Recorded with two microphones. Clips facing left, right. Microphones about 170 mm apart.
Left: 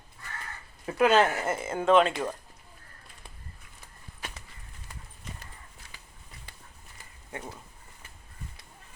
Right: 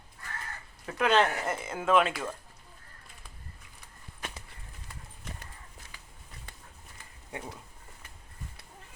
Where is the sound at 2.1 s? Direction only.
15° left (ahead or behind).